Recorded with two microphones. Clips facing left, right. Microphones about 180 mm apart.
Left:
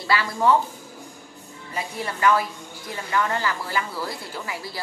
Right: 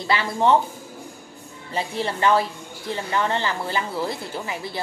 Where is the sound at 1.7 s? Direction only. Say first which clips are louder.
Right 4 dB; 25° right (ahead or behind).